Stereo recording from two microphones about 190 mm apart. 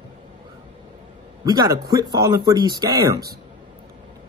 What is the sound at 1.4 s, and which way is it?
Speech, 20° right (ahead or behind).